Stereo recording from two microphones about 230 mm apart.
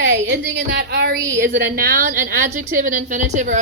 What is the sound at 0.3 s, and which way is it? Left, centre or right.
A woman's voice, right.